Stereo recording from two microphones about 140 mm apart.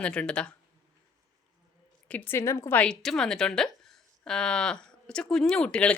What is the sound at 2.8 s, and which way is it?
A woman's voice, 5° left (ahead or behind).